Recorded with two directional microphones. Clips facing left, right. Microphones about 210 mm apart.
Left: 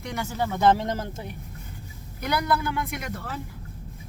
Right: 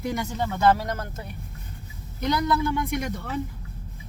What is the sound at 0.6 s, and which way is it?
Speech, 25° left (ahead or behind).